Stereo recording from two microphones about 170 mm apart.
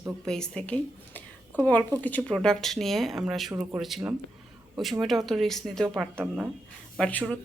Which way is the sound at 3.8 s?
Centre (ahead or behind).